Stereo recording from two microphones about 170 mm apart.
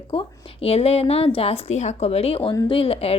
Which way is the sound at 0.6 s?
35° left (ahead or behind).